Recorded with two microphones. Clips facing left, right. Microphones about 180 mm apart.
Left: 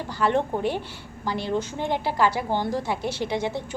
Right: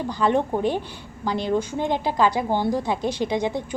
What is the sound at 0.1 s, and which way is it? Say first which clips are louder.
A woman's voice: right 1 dB; 15° right (ahead or behind).